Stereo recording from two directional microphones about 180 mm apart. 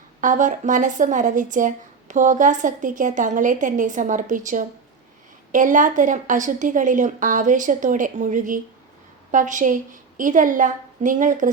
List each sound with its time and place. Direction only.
0.2 s speech: 45° right (ahead or behind)